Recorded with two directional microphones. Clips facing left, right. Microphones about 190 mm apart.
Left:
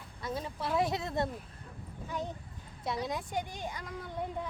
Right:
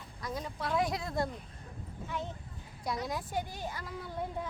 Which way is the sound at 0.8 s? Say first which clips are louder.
Left 1 dB; 25° left (ahead or behind).